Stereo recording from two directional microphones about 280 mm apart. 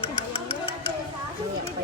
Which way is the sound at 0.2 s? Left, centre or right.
Centre.